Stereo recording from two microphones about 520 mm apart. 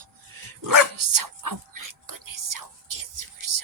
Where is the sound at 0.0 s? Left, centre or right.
Right.